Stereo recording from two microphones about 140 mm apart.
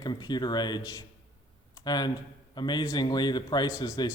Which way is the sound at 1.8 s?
30° left (ahead or behind).